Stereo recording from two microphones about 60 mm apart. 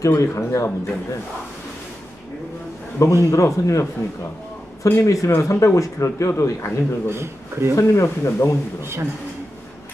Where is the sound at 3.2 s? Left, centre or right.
Left.